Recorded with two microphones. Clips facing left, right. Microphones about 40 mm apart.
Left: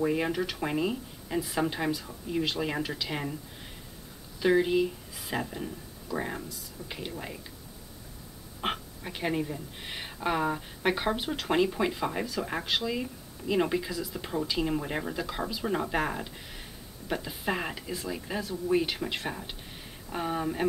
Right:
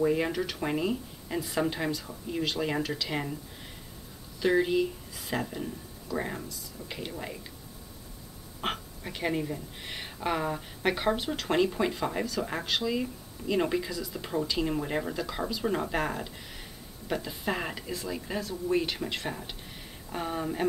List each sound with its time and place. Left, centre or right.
0.0 s speech: centre
4.4 s speech: centre
6.8 s speech: right
8.5 s speech: centre